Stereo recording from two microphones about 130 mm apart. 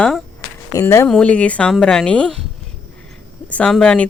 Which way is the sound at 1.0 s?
5° left (ahead or behind).